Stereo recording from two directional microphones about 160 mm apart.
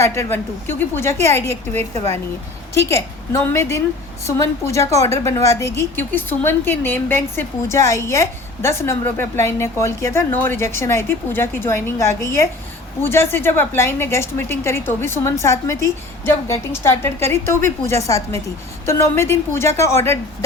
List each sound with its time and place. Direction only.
0.0 s a woman's voice: 15° left (ahead or behind)